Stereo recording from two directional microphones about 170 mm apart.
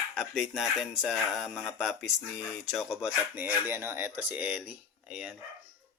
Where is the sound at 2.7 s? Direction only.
Centre (ahead or behind).